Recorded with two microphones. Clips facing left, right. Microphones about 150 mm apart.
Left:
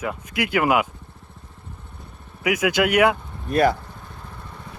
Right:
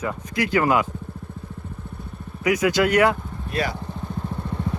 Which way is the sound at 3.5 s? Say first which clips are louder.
Left 8 dB; 50° left (ahead or behind).